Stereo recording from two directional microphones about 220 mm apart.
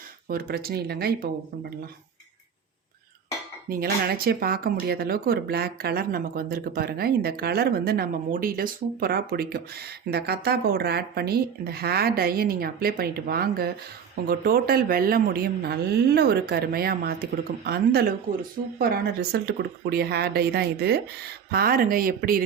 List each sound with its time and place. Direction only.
0.3 s speech: 45° right (ahead or behind)
3.7 s speech: 40° right (ahead or behind)